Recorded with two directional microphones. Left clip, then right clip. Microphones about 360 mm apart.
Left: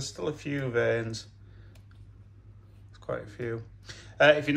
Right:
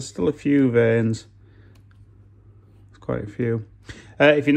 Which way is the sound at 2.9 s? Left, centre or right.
Centre.